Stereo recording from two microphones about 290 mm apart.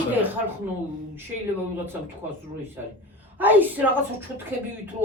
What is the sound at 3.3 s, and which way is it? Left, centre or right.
Speech, centre.